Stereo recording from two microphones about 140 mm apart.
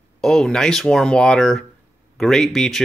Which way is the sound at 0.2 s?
Centre (ahead or behind).